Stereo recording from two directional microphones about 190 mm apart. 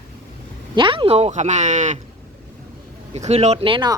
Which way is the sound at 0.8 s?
25° right (ahead or behind).